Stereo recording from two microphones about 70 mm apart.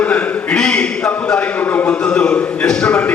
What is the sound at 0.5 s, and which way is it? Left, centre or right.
A man's voice, centre.